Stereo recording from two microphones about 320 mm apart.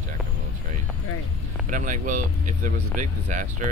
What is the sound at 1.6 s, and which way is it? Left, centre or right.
Speech, right.